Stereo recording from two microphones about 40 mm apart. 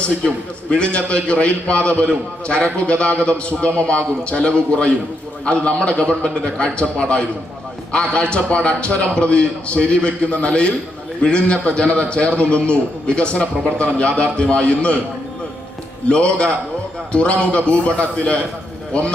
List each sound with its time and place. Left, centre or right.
0.0 s a man's voice: left
16.0 s a man's voice: left